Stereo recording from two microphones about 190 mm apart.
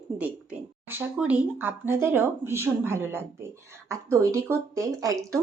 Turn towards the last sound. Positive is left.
turn(degrees=-15)  # may be behind; listen again after turning